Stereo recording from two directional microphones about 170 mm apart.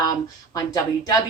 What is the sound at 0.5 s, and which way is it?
Speech, 20° left (ahead or behind).